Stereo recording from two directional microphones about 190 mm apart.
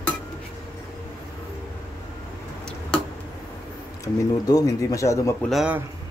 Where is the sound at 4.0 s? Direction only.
20° left (ahead or behind).